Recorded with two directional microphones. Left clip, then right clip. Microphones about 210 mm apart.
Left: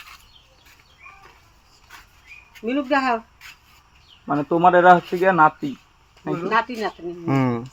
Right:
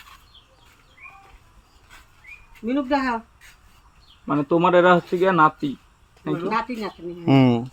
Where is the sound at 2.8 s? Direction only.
20° right (ahead or behind).